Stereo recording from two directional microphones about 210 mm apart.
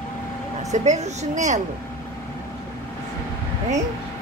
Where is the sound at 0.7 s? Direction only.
35° right (ahead or behind).